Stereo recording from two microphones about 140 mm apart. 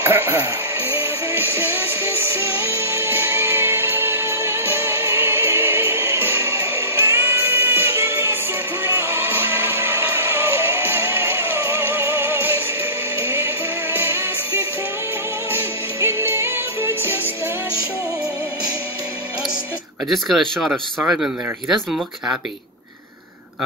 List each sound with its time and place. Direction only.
0.0 s music: 15° right (ahead or behind)
20.1 s speech: centre (ahead or behind)